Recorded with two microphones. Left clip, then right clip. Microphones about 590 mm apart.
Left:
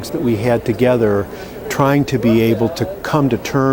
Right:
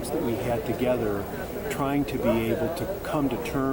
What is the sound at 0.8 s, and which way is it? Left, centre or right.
Speech, left.